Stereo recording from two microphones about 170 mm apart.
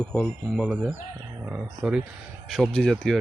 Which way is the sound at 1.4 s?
5° right (ahead or behind).